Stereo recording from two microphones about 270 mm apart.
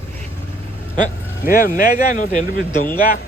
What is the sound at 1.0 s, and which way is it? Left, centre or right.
Speech, left.